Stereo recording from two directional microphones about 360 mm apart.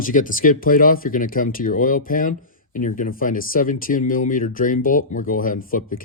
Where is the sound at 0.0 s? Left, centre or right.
Left.